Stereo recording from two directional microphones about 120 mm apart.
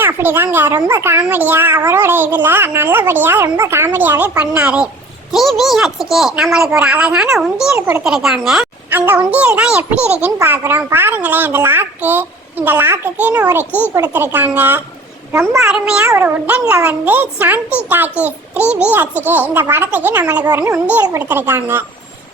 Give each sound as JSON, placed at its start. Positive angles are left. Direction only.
{"t": 0.0, "sound": "a child's voice", "side_deg": -15}
{"t": 7.8, "sound": "speech", "side_deg": -20}
{"t": 8.0, "sound": "a woman's voice", "side_deg": -5}
{"t": 8.9, "sound": "a woman's voice", "side_deg": -15}
{"t": 16.0, "sound": "speech", "side_deg": -20}
{"t": 20.7, "sound": "speech", "side_deg": -10}